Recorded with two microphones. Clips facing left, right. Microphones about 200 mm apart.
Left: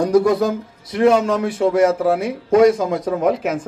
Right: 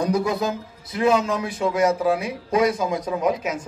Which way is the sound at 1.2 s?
70° left (ahead or behind).